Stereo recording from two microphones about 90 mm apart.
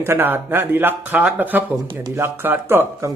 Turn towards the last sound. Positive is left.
turn(degrees=-25)  # may be behind; listen again after turning